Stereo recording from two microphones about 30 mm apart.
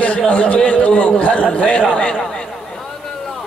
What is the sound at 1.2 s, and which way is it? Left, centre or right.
Speech, left.